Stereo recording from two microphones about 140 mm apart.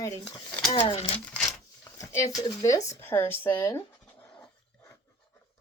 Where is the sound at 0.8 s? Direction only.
40° left (ahead or behind).